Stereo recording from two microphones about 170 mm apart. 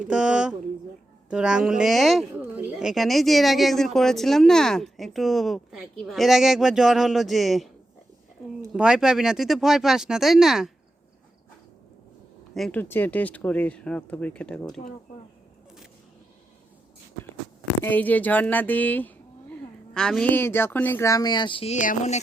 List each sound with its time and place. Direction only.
0.0 s speech: 5° right (ahead or behind)
2.3 s speech: 10° right (ahead or behind)
8.7 s speech: 5° right (ahead or behind)
12.5 s speech: 5° left (ahead or behind)
17.8 s speech: 10° left (ahead or behind); by 22.2 s 45° left (ahead or behind)